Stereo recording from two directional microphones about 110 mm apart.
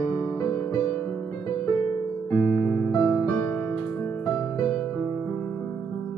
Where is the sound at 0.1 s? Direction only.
25° left (ahead or behind).